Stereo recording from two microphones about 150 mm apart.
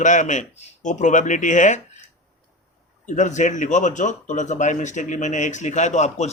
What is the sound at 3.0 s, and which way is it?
Speech, 55° left (ahead or behind).